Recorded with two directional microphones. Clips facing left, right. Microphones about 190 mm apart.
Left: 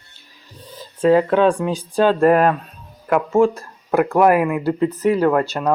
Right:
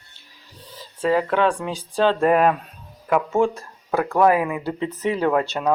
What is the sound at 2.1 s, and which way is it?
Speech, centre (ahead or behind).